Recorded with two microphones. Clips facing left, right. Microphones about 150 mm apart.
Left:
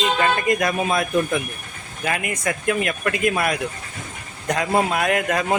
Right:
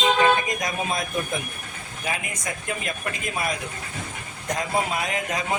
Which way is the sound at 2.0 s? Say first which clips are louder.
Left 6 dB; 65° left (ahead or behind).